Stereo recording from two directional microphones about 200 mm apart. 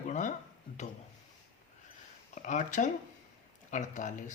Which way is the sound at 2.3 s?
40° left (ahead or behind).